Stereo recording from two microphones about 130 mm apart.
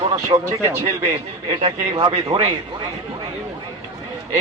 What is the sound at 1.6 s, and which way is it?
Speech, 40° right (ahead or behind).